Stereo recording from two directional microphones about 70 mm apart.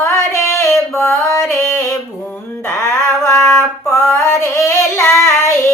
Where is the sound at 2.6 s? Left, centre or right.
Left.